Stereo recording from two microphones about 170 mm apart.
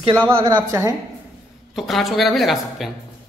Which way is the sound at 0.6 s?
20° right (ahead or behind).